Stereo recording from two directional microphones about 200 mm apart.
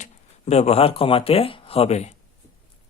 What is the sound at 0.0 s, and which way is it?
Speech, 35° left (ahead or behind).